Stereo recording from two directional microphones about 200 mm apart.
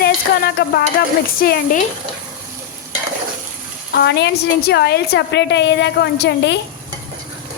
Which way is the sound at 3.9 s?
55° left (ahead or behind).